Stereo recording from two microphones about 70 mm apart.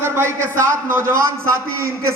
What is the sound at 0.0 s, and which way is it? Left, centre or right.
A man's voice, right.